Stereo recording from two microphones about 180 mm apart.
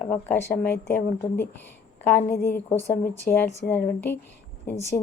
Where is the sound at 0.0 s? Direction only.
10° left (ahead or behind).